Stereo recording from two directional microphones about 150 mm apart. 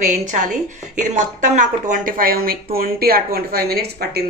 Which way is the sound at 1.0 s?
55° right (ahead or behind).